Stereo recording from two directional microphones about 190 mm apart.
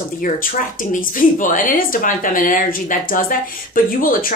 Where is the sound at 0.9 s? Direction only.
45° left (ahead or behind).